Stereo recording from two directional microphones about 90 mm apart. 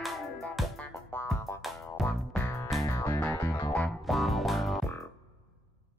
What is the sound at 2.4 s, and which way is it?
Music, 25° left (ahead or behind).